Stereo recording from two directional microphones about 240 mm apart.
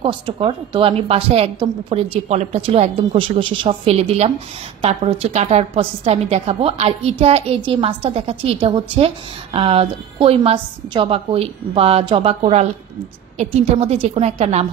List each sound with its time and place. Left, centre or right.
0.0 s a woman's voice: right